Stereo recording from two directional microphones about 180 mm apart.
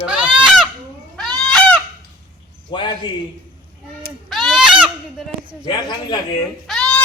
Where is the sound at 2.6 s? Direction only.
25° left (ahead or behind).